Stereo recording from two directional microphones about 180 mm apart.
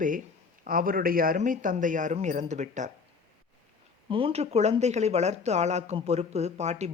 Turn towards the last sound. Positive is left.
turn(degrees=-40)  # may be behind; listen again after turning